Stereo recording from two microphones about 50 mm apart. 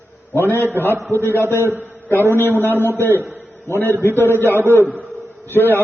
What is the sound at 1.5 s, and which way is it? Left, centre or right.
Speech, right.